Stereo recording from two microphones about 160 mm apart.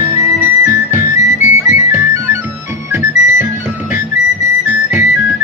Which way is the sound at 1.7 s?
15° right (ahead or behind).